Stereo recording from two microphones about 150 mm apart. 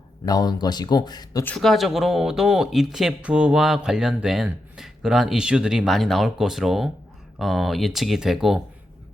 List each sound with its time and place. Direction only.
0.3 s speech: 25° left (ahead or behind)
1.5 s speech: centre (ahead or behind)